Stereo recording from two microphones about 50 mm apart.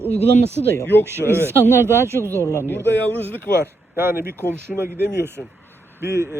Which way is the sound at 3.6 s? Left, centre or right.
Right.